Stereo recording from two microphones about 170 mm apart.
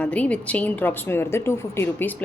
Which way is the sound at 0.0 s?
10° left (ahead or behind).